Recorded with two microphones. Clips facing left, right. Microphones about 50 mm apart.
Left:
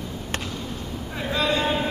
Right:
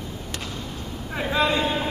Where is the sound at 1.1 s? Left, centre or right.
Centre.